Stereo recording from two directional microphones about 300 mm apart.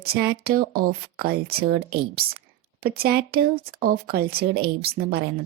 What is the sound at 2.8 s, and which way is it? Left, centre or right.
Speech, right.